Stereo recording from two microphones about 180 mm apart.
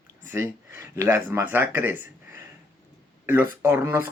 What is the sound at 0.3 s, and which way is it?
Speech, 15° right (ahead or behind).